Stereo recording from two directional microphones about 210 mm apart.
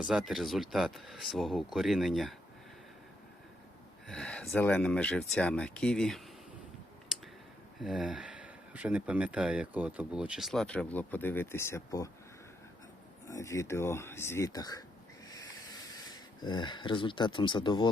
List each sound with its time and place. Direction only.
0.1 s speech: centre (ahead or behind)
4.0 s speech: 5° left (ahead or behind)
7.8 s speech: centre (ahead or behind); by 12.1 s 15° left (ahead or behind)
13.2 s speech: 15° left (ahead or behind)
16.0 s speech: 20° left (ahead or behind)